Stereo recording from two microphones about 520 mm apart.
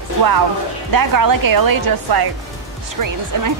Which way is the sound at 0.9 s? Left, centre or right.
Right.